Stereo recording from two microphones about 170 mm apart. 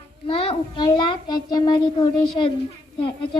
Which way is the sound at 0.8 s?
25° left (ahead or behind).